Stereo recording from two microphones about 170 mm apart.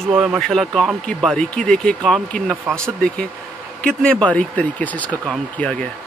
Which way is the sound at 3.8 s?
5° left (ahead or behind).